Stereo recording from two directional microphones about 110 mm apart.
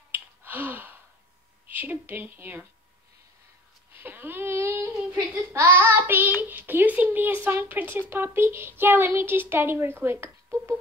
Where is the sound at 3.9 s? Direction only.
15° right (ahead or behind).